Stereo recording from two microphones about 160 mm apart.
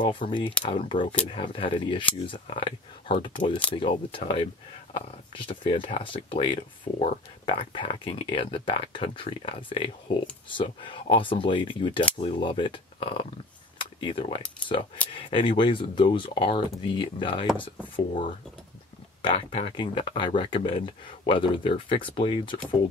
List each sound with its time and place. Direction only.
0.0 s speech: 30° left (ahead or behind)
13.7 s a sound: 30° left (ahead or behind)
15.2 s speech: 35° left (ahead or behind)
19.2 s speech: 35° left (ahead or behind)